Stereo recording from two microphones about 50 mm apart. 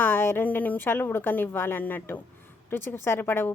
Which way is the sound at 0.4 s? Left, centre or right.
Left.